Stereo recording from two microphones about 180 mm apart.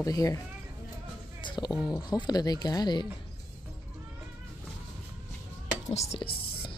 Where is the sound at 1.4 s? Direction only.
25° left (ahead or behind).